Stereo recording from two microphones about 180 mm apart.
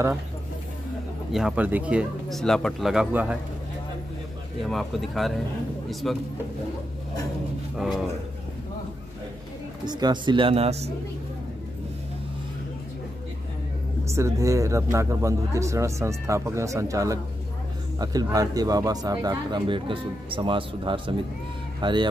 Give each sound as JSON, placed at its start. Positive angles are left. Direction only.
{"t": 1.3, "sound": "speech", "side_deg": -5}
{"t": 4.6, "sound": "speech", "side_deg": 0}
{"t": 7.7, "sound": "speech", "side_deg": 0}
{"t": 9.8, "sound": "speech", "side_deg": -25}
{"t": 14.0, "sound": "speech", "side_deg": -15}